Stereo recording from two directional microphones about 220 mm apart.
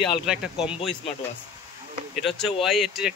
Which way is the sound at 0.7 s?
25° left (ahead or behind).